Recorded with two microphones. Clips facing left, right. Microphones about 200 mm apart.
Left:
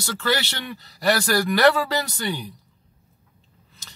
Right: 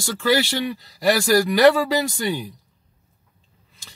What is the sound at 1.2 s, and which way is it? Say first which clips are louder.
Speech: right 5 dB; 15° right (ahead or behind).